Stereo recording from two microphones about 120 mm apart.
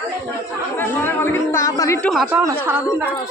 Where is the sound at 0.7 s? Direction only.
15° left (ahead or behind).